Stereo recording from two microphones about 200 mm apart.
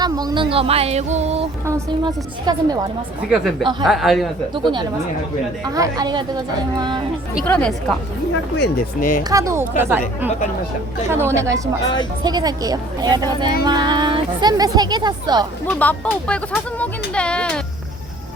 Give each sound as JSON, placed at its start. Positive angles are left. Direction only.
{"t": 0.0, "sound": "speech", "side_deg": -20}
{"t": 1.6, "sound": "speech", "side_deg": -15}
{"t": 3.2, "sound": "speech", "side_deg": -5}
{"t": 3.6, "sound": "speech", "side_deg": -20}
{"t": 3.8, "sound": "speech", "side_deg": 0}
{"t": 5.6, "sound": "speech", "side_deg": -20}
{"t": 7.4, "sound": "speech", "side_deg": 5}
{"t": 8.5, "sound": "speech", "side_deg": 50}
{"t": 9.3, "sound": "speech", "side_deg": -15}
{"t": 15.6, "sound": "speech", "side_deg": 10}